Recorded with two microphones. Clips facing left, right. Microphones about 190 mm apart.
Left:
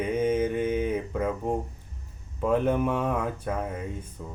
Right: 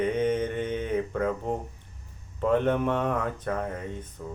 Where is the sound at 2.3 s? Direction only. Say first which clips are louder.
Even; 5° left (ahead or behind).